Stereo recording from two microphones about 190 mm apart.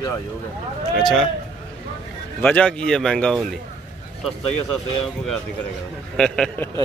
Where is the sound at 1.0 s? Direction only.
Centre (ahead or behind).